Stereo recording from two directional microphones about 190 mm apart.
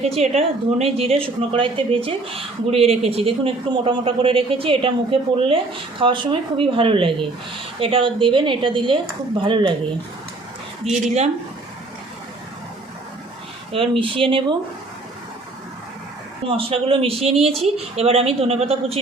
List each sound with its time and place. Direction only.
0.0 s a woman's voice: 35° right (ahead or behind)
10.9 s a woman's voice: 35° right (ahead or behind)
13.7 s a woman's voice: 25° right (ahead or behind)
16.5 s a woman's voice: 30° right (ahead or behind)